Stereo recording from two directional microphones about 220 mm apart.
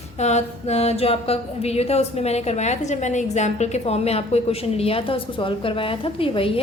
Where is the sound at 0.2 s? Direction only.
30° left (ahead or behind).